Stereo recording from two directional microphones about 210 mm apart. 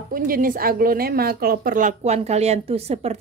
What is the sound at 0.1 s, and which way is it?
A woman's voice, 45° right (ahead or behind).